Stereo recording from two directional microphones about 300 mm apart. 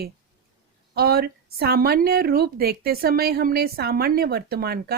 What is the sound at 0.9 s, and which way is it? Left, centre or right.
A woman's voice, right.